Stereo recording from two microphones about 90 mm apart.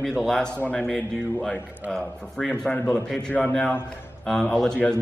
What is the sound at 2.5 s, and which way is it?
A man's voice, 20° left (ahead or behind).